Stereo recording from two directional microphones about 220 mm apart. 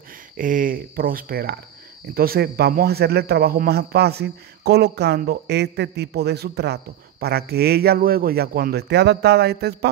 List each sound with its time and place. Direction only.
0.4 s speech: 35° right (ahead or behind)